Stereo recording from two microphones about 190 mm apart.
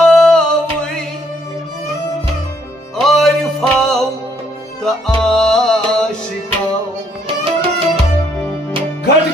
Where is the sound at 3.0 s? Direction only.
Centre (ahead or behind).